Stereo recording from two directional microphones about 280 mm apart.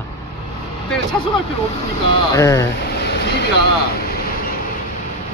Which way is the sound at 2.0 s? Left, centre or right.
Centre.